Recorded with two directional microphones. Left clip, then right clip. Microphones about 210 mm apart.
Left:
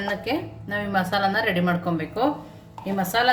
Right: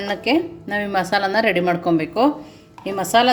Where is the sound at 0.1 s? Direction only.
30° right (ahead or behind).